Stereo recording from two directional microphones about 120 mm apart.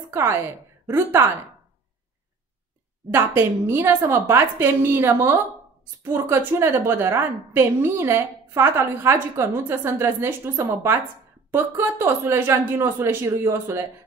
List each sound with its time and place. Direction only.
0.1 s a woman's voice: 20° right (ahead or behind)
3.1 s a woman's voice: 20° right (ahead or behind)